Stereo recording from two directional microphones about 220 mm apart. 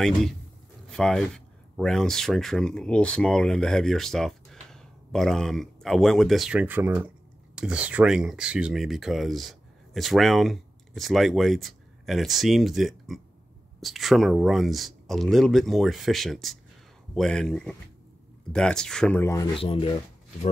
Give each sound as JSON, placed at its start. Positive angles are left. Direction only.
{"t": 0.8, "sound": "speech", "side_deg": 5}
{"t": 19.6, "sound": "speech", "side_deg": 25}